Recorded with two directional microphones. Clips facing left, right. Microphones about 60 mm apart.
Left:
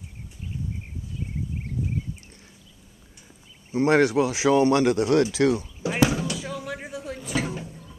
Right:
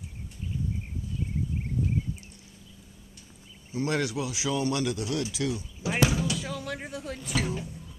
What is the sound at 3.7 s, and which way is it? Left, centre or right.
Speech, left.